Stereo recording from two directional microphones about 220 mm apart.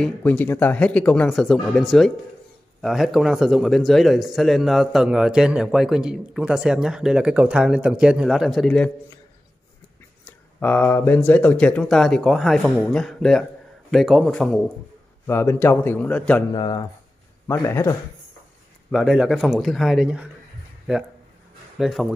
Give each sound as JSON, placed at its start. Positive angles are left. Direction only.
{"t": 0.0, "sound": "speech", "side_deg": 5}
{"t": 10.2, "sound": "a man's voice", "side_deg": 5}
{"t": 16.5, "sound": "a man's voice", "side_deg": 20}
{"t": 18.9, "sound": "speech", "side_deg": 0}